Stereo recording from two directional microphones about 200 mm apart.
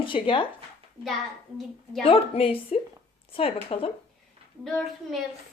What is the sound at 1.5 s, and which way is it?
Speech, centre (ahead or behind).